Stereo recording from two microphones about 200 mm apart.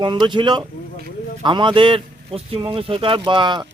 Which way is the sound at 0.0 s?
25° right (ahead or behind).